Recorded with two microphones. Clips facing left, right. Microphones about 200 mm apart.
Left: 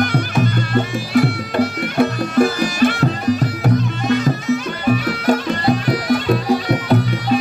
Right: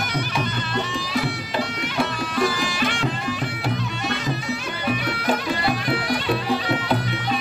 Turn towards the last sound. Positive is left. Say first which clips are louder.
# left 7 dB
turn(degrees=40)  # may be behind; listen again after turning